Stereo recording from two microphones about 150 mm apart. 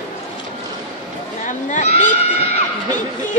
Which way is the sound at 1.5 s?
55° left (ahead or behind).